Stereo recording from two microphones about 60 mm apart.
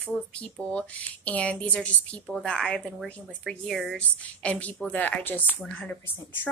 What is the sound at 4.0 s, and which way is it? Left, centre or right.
A woman's voice, left.